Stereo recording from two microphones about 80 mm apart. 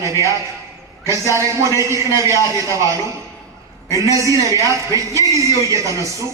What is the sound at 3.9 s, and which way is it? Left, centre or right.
A man's voice, right.